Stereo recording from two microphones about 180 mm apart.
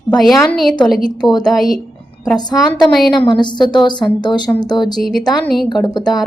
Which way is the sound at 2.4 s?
25° left (ahead or behind).